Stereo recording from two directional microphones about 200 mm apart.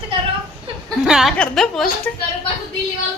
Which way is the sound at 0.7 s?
25° right (ahead or behind).